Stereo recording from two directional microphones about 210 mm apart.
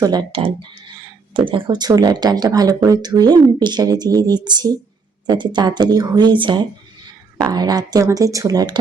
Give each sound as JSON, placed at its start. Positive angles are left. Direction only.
{"t": 0.0, "sound": "speech", "side_deg": -20}